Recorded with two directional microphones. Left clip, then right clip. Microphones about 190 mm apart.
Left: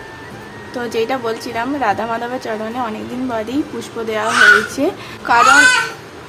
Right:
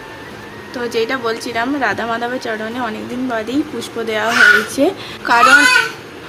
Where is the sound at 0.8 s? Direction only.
15° left (ahead or behind).